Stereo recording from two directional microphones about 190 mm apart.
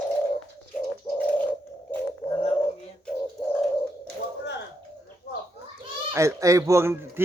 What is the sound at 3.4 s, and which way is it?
Bird, 10° left (ahead or behind).